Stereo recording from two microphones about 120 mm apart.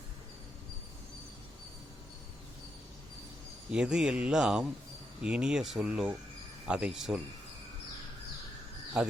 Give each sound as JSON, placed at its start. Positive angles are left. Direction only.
{"t": 3.7, "sound": "speech", "side_deg": -5}
{"t": 8.9, "sound": "speech", "side_deg": -10}